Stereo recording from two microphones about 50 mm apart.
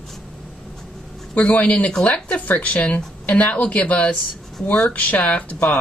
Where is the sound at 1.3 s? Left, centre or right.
Left.